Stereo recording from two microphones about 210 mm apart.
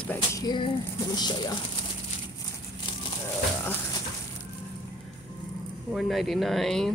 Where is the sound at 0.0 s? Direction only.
10° left (ahead or behind).